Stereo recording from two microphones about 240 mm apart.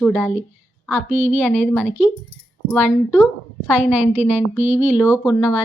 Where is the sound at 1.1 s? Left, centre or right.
Right.